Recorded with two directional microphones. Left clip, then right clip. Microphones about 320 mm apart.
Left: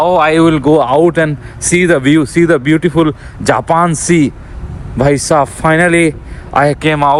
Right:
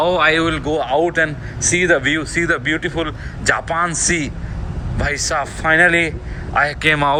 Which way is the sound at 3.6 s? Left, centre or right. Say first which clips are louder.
Left 8 dB; left.